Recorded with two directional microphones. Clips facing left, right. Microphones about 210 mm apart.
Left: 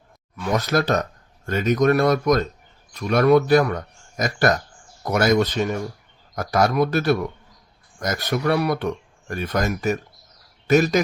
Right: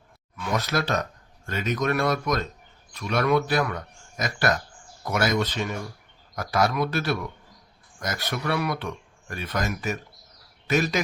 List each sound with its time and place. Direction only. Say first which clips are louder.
0.3 s speech: left 5 dB; 45° left (ahead or behind)